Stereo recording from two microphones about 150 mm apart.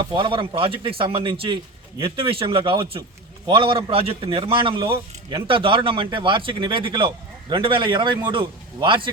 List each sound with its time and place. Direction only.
0.0 s a man's voice: 35° right (ahead or behind)